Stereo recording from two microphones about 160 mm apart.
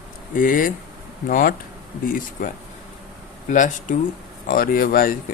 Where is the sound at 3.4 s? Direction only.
55° left (ahead or behind).